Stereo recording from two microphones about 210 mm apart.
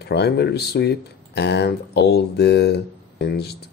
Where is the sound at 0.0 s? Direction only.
50° left (ahead or behind).